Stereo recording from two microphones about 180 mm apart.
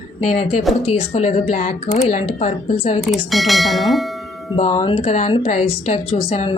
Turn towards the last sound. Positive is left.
turn(degrees=40)  # may be behind; listen again after turning